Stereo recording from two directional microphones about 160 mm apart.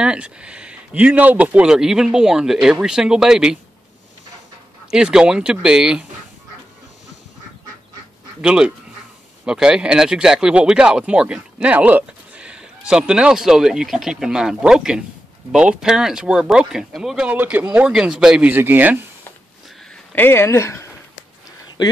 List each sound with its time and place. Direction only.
0.0 s speech: 5° right (ahead or behind)
4.9 s speech: 5° right (ahead or behind)
8.4 s speech: 5° right (ahead or behind)
20.2 s speech: 15° left (ahead or behind)